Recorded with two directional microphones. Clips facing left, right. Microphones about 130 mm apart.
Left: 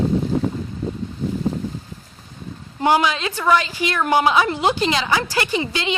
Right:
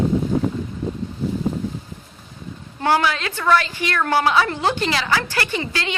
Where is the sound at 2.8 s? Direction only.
15° left (ahead or behind).